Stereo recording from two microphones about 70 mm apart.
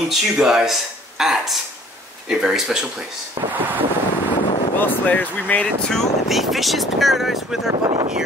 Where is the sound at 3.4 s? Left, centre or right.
Right.